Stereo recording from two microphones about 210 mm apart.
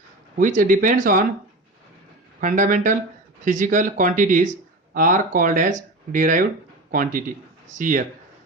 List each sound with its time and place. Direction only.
0.3 s speech: 40° right (ahead or behind)
2.4 s speech: 40° right (ahead or behind)